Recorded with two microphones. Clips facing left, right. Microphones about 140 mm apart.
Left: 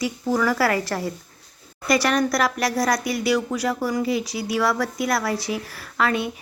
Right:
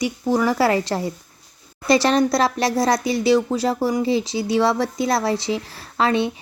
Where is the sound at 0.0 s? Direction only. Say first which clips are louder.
Right 2 dB; 25° right (ahead or behind).